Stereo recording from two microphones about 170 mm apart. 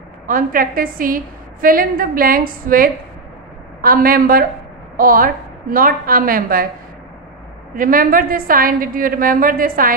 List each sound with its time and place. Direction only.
0.3 s a woman's voice: 55° right (ahead or behind)
7.7 s a woman's voice: 55° right (ahead or behind)